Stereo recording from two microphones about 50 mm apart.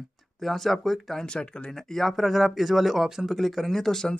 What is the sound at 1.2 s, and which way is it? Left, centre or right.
Speech, centre.